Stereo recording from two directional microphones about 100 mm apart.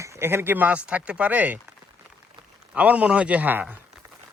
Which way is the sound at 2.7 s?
15° right (ahead or behind).